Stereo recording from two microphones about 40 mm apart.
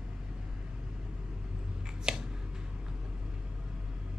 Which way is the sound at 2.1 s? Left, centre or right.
Centre.